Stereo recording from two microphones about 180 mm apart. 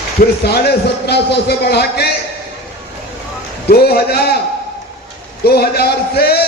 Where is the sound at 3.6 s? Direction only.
60° left (ahead or behind).